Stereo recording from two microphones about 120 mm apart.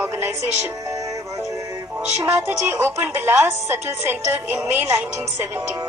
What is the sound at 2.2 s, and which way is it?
Speech, 15° right (ahead or behind).